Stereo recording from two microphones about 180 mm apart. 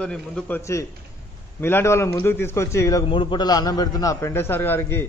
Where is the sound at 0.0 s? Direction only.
5° left (ahead or behind).